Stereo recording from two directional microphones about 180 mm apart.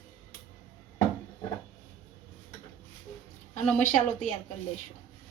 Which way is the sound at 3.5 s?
40° left (ahead or behind).